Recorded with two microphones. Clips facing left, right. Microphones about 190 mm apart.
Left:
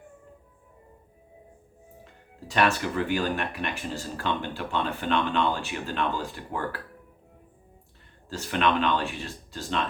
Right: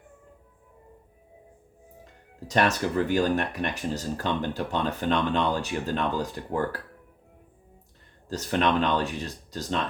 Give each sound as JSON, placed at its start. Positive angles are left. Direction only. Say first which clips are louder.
{"t": 2.5, "sound": "speech", "louder": "right 1 dB", "side_deg": -40}
{"t": 8.3, "sound": "speech", "louder": "right 1 dB", "side_deg": -40}